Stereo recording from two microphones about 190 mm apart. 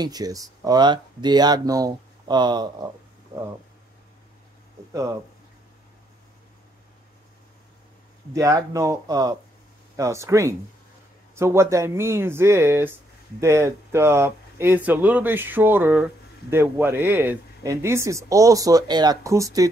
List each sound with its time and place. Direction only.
0.0 s speech: 20° right (ahead or behind)
8.3 s speech: 15° right (ahead or behind)